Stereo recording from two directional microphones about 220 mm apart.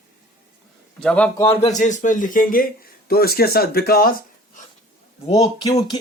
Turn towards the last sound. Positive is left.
turn(degrees=15)  # may be behind; listen again after turning